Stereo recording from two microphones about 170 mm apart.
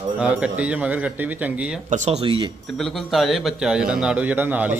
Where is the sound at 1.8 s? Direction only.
45° right (ahead or behind).